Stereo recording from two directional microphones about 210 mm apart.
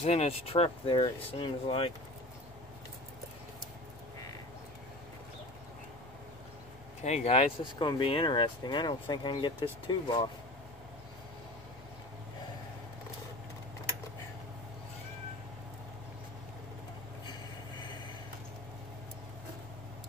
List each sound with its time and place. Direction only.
0.0 s speech: 30° left (ahead or behind)
7.0 s speech: 30° left (ahead or behind)